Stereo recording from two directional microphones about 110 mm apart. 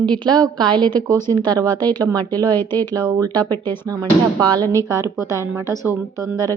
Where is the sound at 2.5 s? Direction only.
20° left (ahead or behind).